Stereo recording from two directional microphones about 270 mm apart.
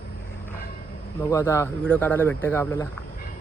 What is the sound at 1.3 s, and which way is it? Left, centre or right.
Speech, centre.